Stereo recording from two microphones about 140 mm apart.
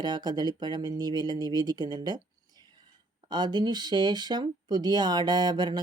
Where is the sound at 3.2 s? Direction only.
30° right (ahead or behind).